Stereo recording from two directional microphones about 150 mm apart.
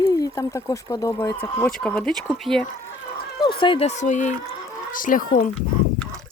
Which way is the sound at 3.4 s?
35° left (ahead or behind).